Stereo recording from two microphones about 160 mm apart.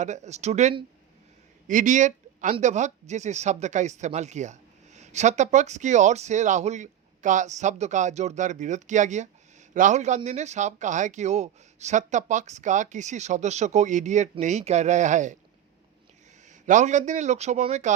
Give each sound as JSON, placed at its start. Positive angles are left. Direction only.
{"t": 0.0, "sound": "speech", "side_deg": -45}
{"t": 16.5, "sound": "a sound", "side_deg": -50}
{"t": 17.1, "sound": "speech", "side_deg": -50}